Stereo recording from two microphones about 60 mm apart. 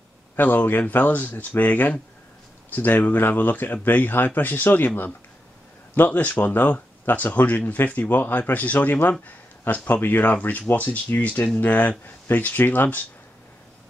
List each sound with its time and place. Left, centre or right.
0.4 s speech: left